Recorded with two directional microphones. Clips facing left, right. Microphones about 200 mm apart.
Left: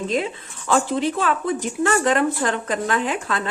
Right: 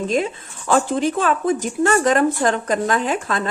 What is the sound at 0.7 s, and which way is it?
A woman's voice, 45° right (ahead or behind).